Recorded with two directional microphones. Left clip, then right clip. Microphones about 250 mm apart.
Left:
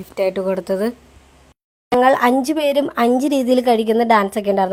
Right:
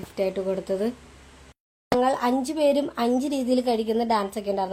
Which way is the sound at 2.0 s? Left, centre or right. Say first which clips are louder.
Left 10 dB; left.